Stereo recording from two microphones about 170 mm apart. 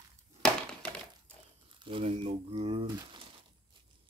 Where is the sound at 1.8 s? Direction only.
30° right (ahead or behind).